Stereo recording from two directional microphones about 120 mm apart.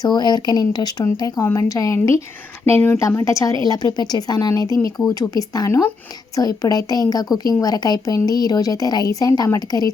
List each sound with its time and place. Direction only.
0.0 s a woman's voice: 35° left (ahead or behind)